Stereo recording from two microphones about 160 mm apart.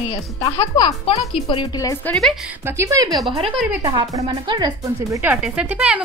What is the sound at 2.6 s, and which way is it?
Speech, 15° right (ahead or behind).